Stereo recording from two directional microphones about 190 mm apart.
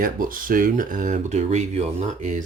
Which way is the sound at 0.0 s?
45° right (ahead or behind).